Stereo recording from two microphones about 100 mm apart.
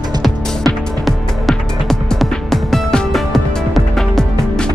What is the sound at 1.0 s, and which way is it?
Music, centre (ahead or behind).